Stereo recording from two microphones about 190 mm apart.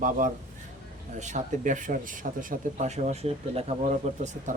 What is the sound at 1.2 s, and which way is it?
Speech, 40° right (ahead or behind).